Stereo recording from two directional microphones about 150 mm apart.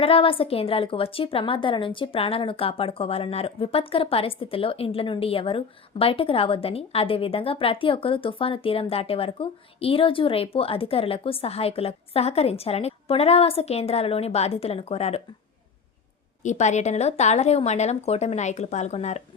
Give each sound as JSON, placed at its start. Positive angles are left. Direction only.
{"t": 0.0, "sound": "speech", "side_deg": 40}
{"t": 16.4, "sound": "speech", "side_deg": 50}